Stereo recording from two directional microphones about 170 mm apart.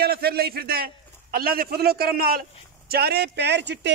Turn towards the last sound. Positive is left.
turn(degrees=-90)